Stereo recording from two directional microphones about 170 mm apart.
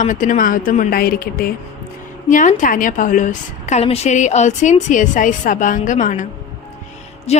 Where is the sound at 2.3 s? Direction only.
50° left (ahead or behind).